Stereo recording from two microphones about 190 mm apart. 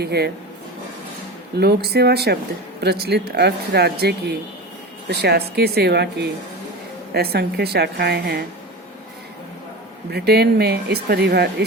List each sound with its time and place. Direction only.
0.0 s speech: 60° right (ahead or behind)
1.5 s speech: 55° right (ahead or behind)
10.1 s speech: 55° right (ahead or behind)